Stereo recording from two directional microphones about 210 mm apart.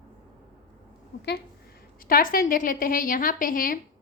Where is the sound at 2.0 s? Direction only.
45° left (ahead or behind).